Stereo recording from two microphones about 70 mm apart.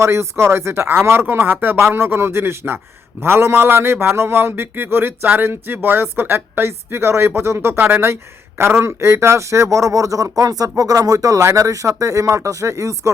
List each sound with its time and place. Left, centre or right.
0.0 s a man's voice: right